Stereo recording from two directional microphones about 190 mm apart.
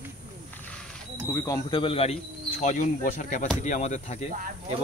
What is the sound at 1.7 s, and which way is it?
Speech, 30° left (ahead or behind).